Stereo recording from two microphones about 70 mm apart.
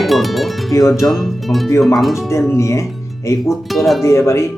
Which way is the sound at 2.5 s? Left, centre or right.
Left.